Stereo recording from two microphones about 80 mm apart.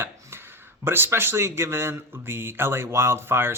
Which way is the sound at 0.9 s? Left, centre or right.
Right.